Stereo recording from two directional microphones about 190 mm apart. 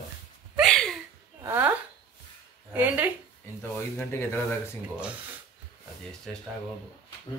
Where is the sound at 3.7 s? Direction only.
10° left (ahead or behind).